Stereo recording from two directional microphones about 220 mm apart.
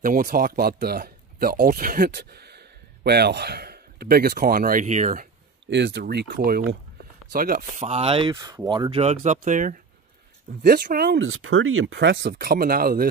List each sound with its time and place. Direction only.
0.0 s speech: 40° right (ahead or behind)
5.7 s speech: 50° right (ahead or behind)
11.1 s speech: 65° right (ahead or behind); by 13.1 s 40° right (ahead or behind)